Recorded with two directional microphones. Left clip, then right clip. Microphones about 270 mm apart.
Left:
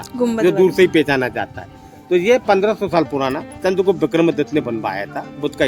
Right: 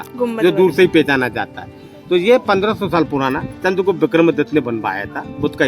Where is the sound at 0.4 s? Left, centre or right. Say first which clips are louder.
Right 1 dB; right.